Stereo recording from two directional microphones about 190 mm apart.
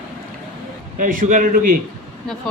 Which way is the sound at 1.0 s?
45° right (ahead or behind).